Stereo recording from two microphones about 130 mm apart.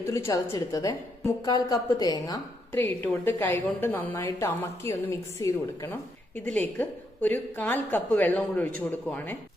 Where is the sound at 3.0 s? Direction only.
15° left (ahead or behind).